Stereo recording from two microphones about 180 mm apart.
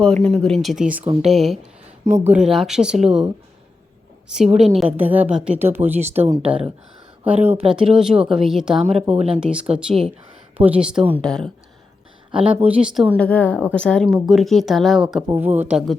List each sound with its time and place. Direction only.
0.0 s speech: 5° left (ahead or behind)
1.0 s speech: 35° right (ahead or behind)
1.3 s speech: centre (ahead or behind)
4.5 s a woman's voice: centre (ahead or behind)
6.0 s speech: 40° right (ahead or behind)
7.9 s speech: 5° right (ahead or behind)
8.8 s speech: 35° right (ahead or behind)
9.4 s speech: 5° right (ahead or behind)
12.3 s speech: 30° right (ahead or behind)
12.5 s speech: 10° right (ahead or behind)